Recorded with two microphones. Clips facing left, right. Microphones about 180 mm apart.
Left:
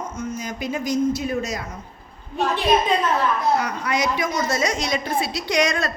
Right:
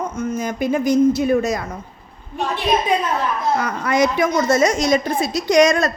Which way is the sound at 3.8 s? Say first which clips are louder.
Right 6 dB; 50° right (ahead or behind).